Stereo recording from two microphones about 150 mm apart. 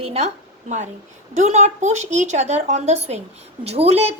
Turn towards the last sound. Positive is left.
turn(degrees=-45)  # may be behind; listen again after turning